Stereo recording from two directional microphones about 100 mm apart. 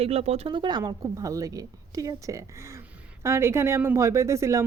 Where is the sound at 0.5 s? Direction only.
50° right (ahead or behind).